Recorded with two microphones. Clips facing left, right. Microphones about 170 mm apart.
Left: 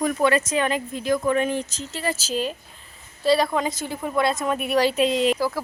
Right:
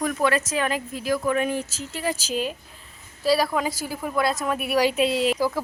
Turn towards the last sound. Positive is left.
turn(degrees=-5)  # may be behind; listen again after turning